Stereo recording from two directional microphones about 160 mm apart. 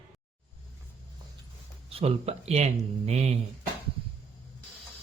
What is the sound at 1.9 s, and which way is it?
Speech, 40° right (ahead or behind).